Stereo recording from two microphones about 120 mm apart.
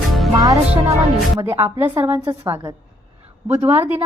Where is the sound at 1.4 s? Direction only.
20° right (ahead or behind).